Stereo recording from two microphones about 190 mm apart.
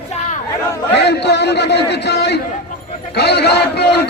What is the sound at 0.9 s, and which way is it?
A man's voice, 60° left (ahead or behind).